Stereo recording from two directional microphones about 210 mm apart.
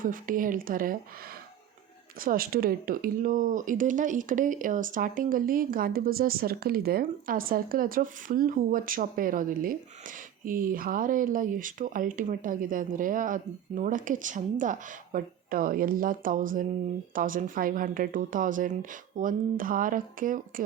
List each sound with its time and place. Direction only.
0.0 s speech: 40° right (ahead or behind)
2.2 s speech: 45° right (ahead or behind)